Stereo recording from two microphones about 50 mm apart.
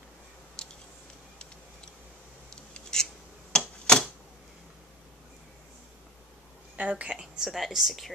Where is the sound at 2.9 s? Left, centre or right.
Centre.